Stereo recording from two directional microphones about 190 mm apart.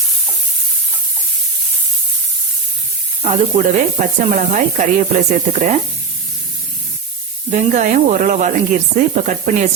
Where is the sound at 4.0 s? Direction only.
40° right (ahead or behind).